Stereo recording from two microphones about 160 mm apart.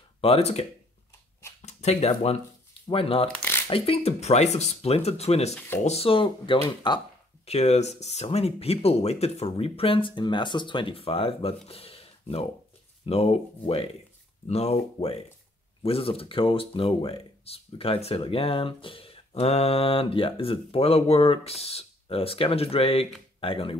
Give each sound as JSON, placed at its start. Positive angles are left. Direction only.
{"t": 0.2, "sound": "speech", "side_deg": 40}
{"t": 1.7, "sound": "speech", "side_deg": 45}
{"t": 3.3, "sound": "shuffling cards", "side_deg": 10}
{"t": 3.6, "sound": "speech", "side_deg": 35}
{"t": 7.4, "sound": "speech", "side_deg": 40}